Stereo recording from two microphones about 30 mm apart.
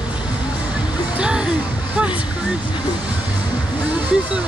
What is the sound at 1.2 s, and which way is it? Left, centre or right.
Speech, right.